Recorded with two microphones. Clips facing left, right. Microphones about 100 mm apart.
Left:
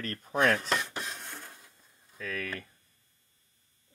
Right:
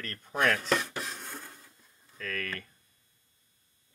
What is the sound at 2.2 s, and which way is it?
Speech, 10° left (ahead or behind).